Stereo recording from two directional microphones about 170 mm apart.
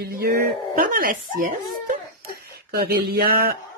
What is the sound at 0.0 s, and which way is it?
Speech, 65° right (ahead or behind).